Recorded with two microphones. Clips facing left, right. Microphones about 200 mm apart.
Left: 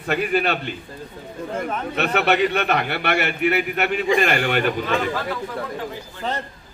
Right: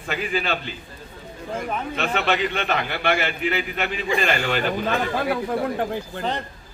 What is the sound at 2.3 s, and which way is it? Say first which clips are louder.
A man's voice: left 5 dB; 60° left (ahead or behind).